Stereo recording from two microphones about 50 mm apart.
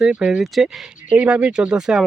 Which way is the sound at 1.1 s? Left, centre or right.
Right.